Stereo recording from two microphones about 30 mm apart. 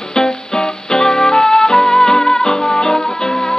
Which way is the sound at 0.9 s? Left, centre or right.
Centre.